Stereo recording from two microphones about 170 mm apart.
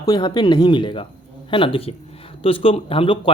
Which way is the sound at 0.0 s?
25° left (ahead or behind).